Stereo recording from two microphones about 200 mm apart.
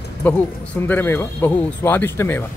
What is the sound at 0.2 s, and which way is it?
Speech, 10° left (ahead or behind).